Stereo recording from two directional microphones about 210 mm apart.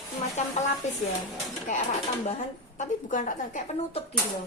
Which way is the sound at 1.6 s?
35° left (ahead or behind).